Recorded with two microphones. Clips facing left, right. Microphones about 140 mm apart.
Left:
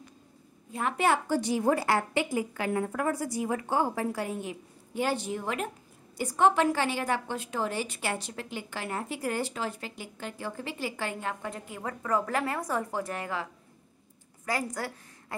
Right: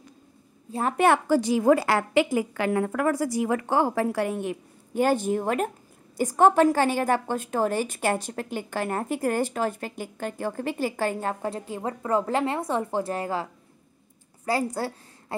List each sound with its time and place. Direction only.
0.7 s a woman's voice: 35° right (ahead or behind)
0.9 s a woman's voice: 60° right (ahead or behind); by 15.3 s 30° right (ahead or behind)